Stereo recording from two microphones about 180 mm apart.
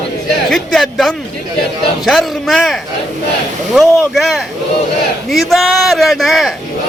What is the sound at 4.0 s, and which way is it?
A man's voice, centre (ahead or behind).